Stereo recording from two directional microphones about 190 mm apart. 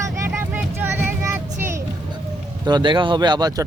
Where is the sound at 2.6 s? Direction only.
25° right (ahead or behind).